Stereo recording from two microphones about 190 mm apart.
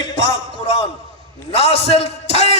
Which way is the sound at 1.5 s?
30° left (ahead or behind).